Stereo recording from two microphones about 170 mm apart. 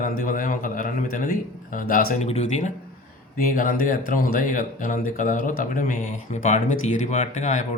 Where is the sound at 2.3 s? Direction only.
40° left (ahead or behind).